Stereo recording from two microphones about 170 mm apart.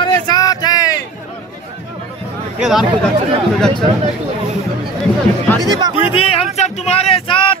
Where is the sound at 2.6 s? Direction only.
Centre (ahead or behind).